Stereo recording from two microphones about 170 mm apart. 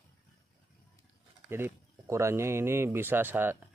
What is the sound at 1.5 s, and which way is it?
Speech, 15° right (ahead or behind).